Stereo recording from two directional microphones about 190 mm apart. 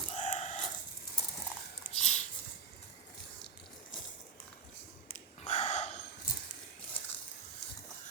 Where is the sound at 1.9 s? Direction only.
35° left (ahead or behind).